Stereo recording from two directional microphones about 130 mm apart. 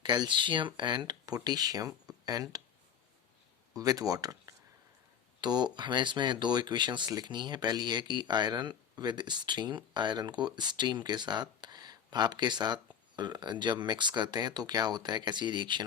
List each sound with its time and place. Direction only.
0.0 s speech: 35° right (ahead or behind)
3.8 s speech: 30° right (ahead or behind)